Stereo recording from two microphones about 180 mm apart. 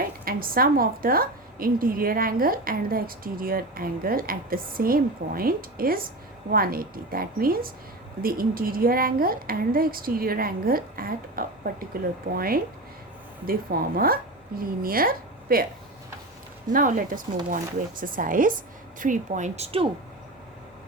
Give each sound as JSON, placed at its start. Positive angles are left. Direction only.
{"t": 0.3, "sound": "a woman's voice", "side_deg": -55}
{"t": 16.6, "sound": "a woman's voice", "side_deg": -45}